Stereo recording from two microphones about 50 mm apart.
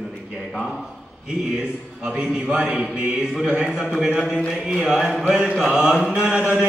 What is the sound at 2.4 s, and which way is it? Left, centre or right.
Mantra, right.